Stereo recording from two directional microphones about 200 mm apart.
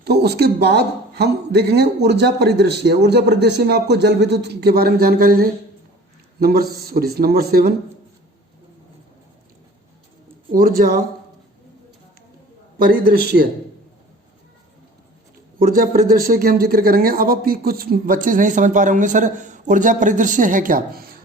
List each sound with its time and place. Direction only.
0.0 s speech: 55° right (ahead or behind)
10.5 s speech: 45° right (ahead or behind)
12.8 s speech: 50° right (ahead or behind)
15.5 s speech: 45° right (ahead or behind)